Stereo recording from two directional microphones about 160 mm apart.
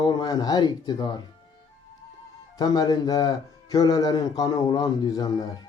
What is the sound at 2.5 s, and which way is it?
Speech, 25° left (ahead or behind).